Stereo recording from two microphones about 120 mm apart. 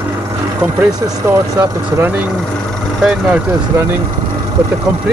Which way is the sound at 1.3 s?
25° right (ahead or behind).